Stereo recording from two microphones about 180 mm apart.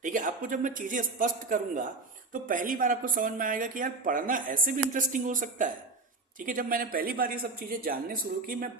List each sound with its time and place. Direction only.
0.0 s speech: 45° right (ahead or behind)